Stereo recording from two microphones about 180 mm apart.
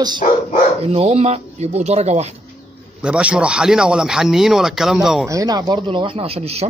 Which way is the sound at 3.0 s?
5° right (ahead or behind).